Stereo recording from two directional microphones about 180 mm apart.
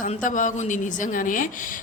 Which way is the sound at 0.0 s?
45° left (ahead or behind).